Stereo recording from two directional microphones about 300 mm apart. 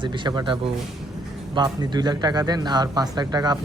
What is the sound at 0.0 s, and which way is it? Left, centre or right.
Speech, centre.